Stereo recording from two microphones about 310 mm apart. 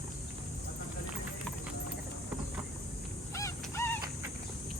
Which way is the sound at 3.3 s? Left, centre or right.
Centre.